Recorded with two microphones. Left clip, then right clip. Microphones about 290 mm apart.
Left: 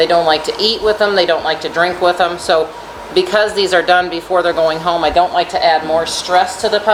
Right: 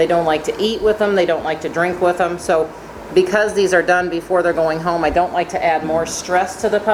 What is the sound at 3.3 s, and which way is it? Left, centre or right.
Speech, centre.